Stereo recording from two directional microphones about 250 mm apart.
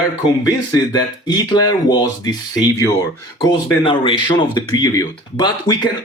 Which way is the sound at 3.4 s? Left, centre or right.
Centre.